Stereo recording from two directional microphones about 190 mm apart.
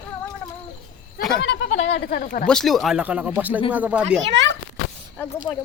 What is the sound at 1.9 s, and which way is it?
Speech, 55° left (ahead or behind).